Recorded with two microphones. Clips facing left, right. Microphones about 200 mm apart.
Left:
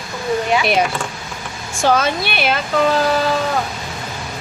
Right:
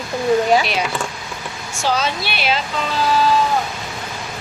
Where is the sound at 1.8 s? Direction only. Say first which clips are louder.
Left 4 dB; 55° left (ahead or behind).